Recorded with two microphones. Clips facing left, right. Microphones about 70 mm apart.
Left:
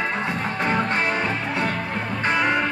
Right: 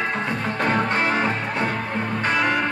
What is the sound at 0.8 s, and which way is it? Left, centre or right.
Music, right.